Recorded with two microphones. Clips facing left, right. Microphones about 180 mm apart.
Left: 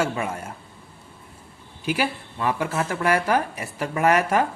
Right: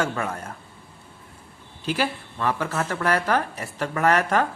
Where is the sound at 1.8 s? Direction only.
10° left (ahead or behind).